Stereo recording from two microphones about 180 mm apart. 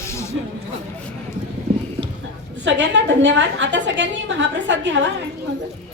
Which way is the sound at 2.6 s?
90° right.